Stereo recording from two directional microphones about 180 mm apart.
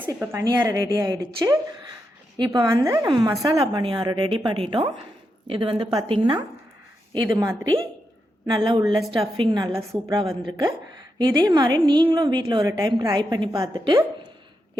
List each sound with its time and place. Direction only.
0.0 s a woman's voice: 10° right (ahead or behind)
8.5 s a woman's voice: 25° right (ahead or behind)